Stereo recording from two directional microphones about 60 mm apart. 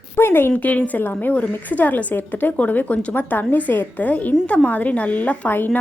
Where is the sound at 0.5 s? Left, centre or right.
Left.